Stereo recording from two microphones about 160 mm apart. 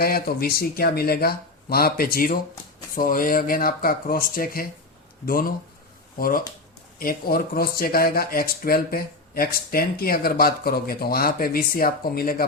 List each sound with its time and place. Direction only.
0.0 s speech: 70° left (ahead or behind)